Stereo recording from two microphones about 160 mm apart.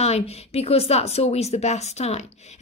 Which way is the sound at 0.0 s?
40° left (ahead or behind).